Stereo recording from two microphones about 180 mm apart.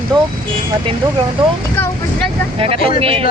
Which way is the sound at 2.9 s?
30° right (ahead or behind).